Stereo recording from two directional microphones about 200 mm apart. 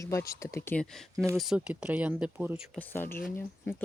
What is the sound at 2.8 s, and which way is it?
Speech, 10° left (ahead or behind).